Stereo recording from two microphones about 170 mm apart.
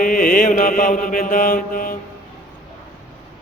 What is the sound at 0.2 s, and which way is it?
Mantra, 55° left (ahead or behind).